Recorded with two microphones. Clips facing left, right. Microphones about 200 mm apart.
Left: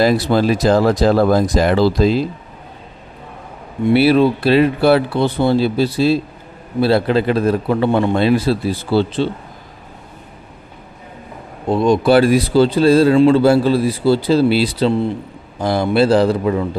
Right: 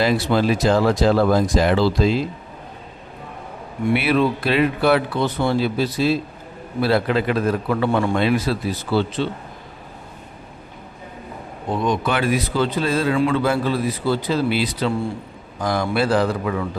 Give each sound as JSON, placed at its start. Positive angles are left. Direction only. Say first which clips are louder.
{"t": 0.0, "sound": "speech", "louder": "left 4 dB", "side_deg": 40}
{"t": 3.8, "sound": "speech", "louder": "left 6 dB", "side_deg": 30}
{"t": 11.7, "sound": "a man's voice", "louder": "left 9 dB", "side_deg": 30}